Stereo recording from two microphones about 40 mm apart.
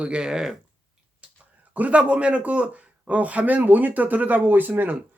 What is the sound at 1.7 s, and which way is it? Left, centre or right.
Speech, right.